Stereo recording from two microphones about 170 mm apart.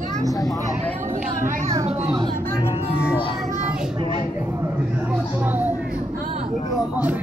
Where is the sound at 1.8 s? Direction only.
40° right (ahead or behind).